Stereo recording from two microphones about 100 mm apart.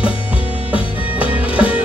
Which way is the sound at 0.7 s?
15° right (ahead or behind).